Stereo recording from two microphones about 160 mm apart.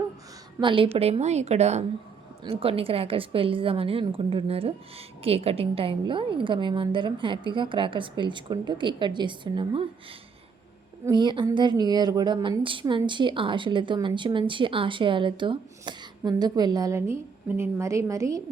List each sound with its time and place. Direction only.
0.6 s a woman's voice: 30° right (ahead or behind)
11.0 s a woman's voice: 30° right (ahead or behind)